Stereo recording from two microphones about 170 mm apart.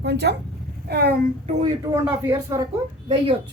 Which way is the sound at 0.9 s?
70° right (ahead or behind).